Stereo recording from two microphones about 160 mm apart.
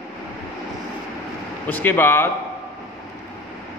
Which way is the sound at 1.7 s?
10° left (ahead or behind).